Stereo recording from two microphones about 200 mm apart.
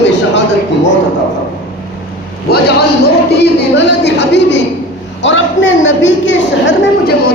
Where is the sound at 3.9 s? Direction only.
60° left (ahead or behind).